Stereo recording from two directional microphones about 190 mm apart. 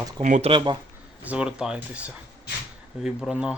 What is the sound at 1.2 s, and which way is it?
Speech, 5° right (ahead or behind).